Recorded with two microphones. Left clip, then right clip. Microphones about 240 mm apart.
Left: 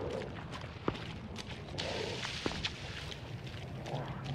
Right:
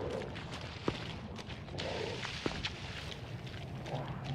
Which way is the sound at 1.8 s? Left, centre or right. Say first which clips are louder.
Left 1 dB; left.